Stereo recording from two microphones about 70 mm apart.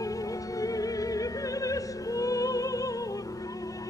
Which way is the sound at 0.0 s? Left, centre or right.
Left.